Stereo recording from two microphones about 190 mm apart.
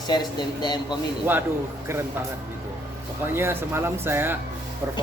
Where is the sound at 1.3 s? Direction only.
10° right (ahead or behind).